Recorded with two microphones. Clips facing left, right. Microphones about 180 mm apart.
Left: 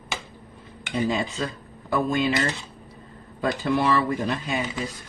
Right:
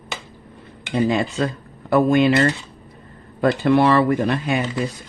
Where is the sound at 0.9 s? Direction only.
65° right (ahead or behind).